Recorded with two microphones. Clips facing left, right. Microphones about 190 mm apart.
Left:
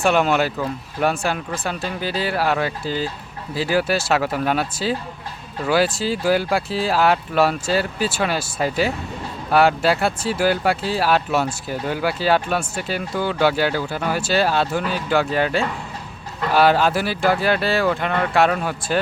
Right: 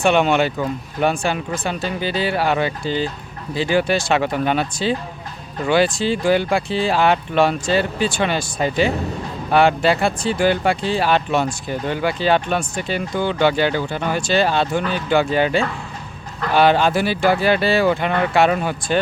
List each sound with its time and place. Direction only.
0.0 s speech: centre (ahead or behind)